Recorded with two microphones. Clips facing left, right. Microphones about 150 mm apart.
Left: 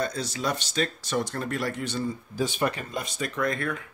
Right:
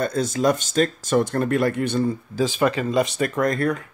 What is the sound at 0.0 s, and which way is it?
Speech, 50° right (ahead or behind).